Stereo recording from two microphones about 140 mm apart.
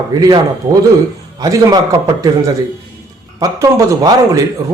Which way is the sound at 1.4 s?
25° right (ahead or behind).